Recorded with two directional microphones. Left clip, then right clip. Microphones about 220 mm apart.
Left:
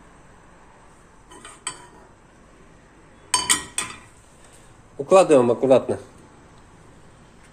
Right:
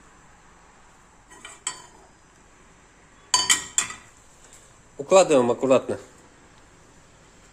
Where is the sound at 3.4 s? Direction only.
Centre (ahead or behind).